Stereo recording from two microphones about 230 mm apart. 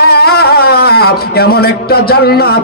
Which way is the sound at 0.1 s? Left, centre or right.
Left.